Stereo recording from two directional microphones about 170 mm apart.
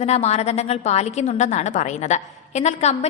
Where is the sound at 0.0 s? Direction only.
40° left (ahead or behind).